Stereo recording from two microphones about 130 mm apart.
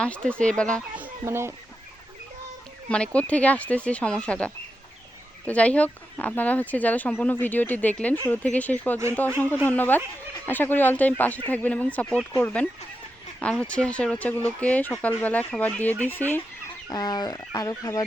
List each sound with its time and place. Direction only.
0.0 s speech: 10° left (ahead or behind)
1.2 s speech: 20° right (ahead or behind)
2.9 s speech: 10° left (ahead or behind)
13.4 s speech: 10° left (ahead or behind)
16.9 s speech: 30° left (ahead or behind)